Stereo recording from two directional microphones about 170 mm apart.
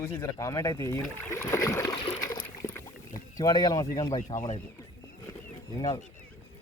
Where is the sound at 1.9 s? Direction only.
30° left (ahead or behind).